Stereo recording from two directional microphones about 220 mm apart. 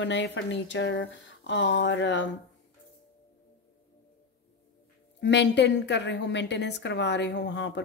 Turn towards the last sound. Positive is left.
turn(degrees=55)  # may be behind; listen again after turning